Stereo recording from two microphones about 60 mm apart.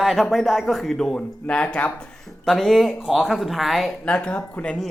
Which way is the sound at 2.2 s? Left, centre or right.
Centre.